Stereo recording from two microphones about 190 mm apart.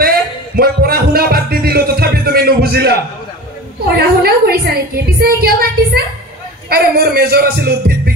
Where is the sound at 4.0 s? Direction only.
55° right (ahead or behind).